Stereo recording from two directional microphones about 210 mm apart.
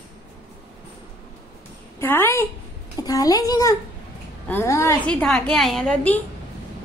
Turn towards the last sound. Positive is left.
turn(degrees=5)  # may be behind; listen again after turning